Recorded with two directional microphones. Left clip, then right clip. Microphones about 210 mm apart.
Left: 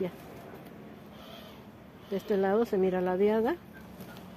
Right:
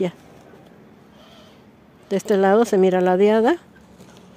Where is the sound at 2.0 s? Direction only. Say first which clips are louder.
Right 11 dB; 55° right (ahead or behind).